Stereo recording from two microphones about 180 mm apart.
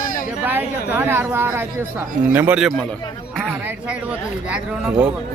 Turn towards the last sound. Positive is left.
turn(degrees=-5)  # may be behind; listen again after turning